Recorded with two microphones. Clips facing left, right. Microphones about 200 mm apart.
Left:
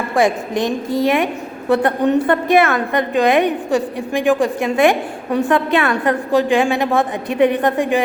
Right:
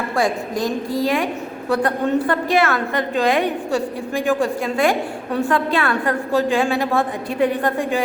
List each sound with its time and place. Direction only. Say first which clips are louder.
0.2 s a woman's voice: left 4 dB; 20° left (ahead or behind)